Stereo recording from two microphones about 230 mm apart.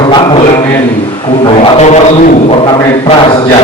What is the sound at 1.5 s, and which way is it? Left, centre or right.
Speech, left.